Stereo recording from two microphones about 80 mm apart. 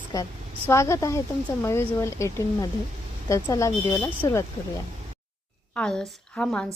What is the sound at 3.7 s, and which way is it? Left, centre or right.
Speech, left.